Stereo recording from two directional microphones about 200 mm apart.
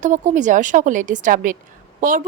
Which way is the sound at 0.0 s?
40° right (ahead or behind).